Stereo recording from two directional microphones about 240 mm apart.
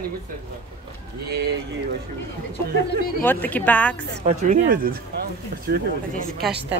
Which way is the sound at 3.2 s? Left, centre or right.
Centre.